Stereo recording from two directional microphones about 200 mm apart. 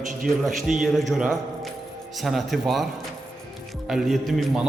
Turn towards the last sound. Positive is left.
turn(degrees=0)  # may be behind; listen again after turning